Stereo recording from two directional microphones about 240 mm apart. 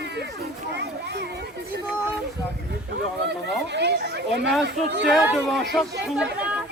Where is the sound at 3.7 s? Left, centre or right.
Right.